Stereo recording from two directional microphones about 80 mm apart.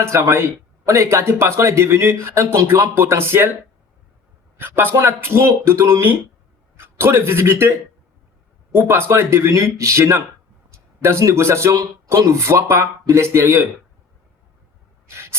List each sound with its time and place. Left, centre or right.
0.0 s speech: right
2.9 s speech: right
4.5 s a man's voice: right
8.7 s speech: right
15.0 s a sound: right